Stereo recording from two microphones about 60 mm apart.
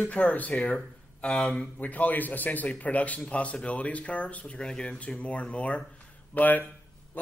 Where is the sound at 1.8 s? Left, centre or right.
Left.